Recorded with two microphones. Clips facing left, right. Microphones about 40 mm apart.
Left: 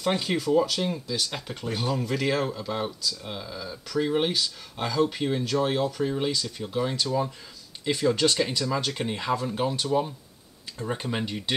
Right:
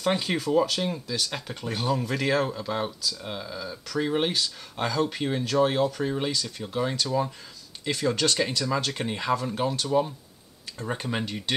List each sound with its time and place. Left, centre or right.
0.0 s speech: centre